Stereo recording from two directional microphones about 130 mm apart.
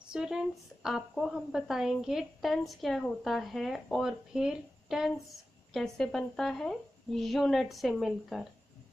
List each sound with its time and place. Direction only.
0.1 s a woman's voice: 5° right (ahead or behind)